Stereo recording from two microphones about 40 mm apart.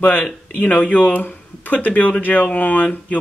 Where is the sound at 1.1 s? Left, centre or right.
Left.